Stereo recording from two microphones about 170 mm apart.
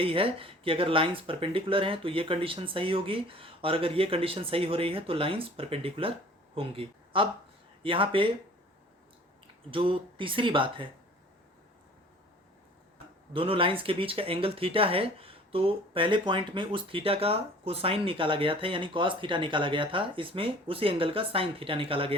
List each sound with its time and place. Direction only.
0.0 s speech: 35° right (ahead or behind)
9.7 s speech: 30° right (ahead or behind)
13.3 s speech: 30° right (ahead or behind)